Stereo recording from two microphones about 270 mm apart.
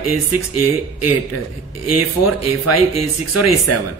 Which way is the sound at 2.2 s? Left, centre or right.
Left.